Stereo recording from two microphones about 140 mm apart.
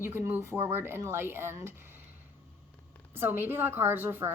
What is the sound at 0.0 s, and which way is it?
A woman's voice, 15° right (ahead or behind).